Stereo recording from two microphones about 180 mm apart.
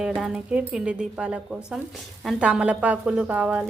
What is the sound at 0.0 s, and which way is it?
Speech, 5° right (ahead or behind).